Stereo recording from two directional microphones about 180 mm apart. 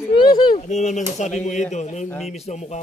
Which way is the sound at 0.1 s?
25° left (ahead or behind).